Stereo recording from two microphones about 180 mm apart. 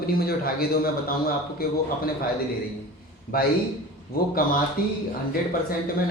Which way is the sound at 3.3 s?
55° left (ahead or behind).